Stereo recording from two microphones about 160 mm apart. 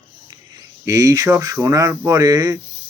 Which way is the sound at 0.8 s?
20° right (ahead or behind).